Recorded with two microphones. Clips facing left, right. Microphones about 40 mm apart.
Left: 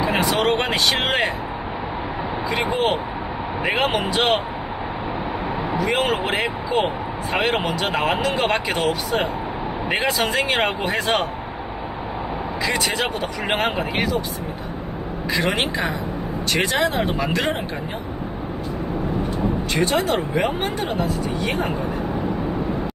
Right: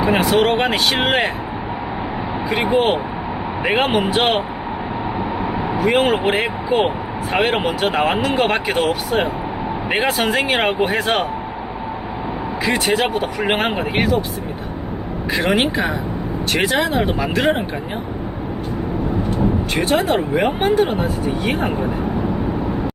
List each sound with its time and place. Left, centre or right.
0.0 s speech: centre
2.5 s speech: centre
5.8 s speech: centre
12.6 s speech: centre
15.3 s speech: centre
19.7 s speech: centre